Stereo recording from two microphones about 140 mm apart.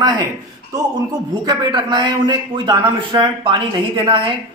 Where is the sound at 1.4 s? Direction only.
30° right (ahead or behind).